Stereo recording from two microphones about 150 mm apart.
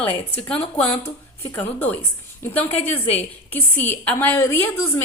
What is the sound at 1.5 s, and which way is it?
A woman's voice, 10° left (ahead or behind).